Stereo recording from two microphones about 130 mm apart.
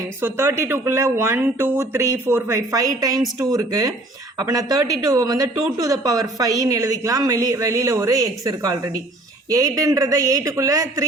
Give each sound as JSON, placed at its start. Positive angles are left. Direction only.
{"t": 0.2, "sound": "speech", "side_deg": -20}